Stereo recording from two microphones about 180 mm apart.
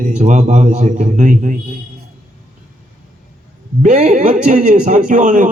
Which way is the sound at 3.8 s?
40° right (ahead or behind).